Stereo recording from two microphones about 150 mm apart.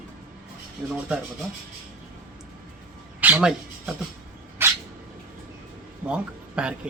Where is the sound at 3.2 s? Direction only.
10° right (ahead or behind).